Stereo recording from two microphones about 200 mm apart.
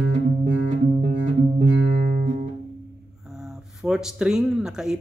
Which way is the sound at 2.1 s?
40° right (ahead or behind).